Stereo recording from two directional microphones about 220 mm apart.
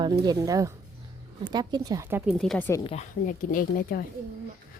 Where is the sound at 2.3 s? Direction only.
Centre (ahead or behind).